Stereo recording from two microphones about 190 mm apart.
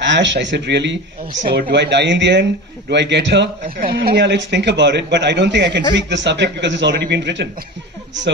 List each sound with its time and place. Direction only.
0.0 s a man's voice: 70° right (ahead or behind)